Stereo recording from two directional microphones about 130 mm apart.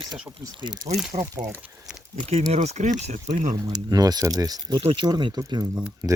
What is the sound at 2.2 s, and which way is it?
Speech, 55° right (ahead or behind).